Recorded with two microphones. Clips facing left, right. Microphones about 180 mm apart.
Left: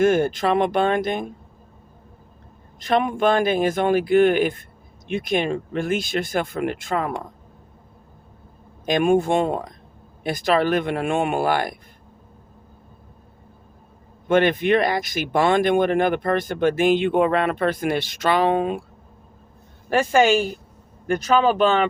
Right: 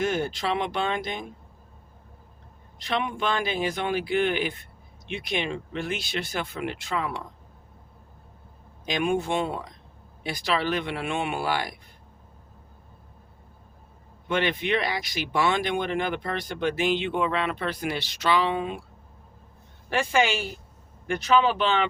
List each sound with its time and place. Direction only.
0.0 s speech: 50° left (ahead or behind)
2.7 s speech: 45° left (ahead or behind)
8.9 s speech: 50° left (ahead or behind)
14.3 s speech: 50° left (ahead or behind)
19.9 s speech: 45° left (ahead or behind)